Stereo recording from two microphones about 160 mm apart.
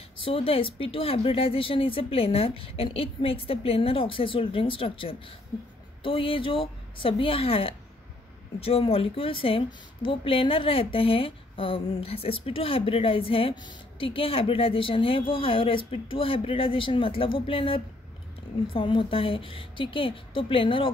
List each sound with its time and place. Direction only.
0.2 s a woman's voice: 35° left (ahead or behind)